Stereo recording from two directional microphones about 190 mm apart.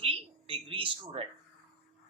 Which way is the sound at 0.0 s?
30° right (ahead or behind).